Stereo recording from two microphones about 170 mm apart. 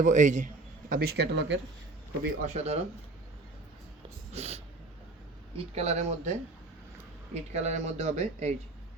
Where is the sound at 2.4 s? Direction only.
45° right (ahead or behind).